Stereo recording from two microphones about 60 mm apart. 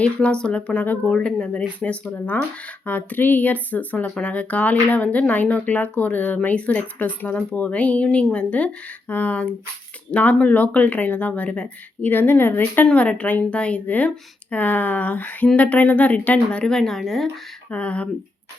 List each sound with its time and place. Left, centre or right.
0.0 s speech: centre
2.0 s speech: left
12.0 s a woman's voice: left
12.9 s speech: left; by 17.4 s centre
17.7 s speech: left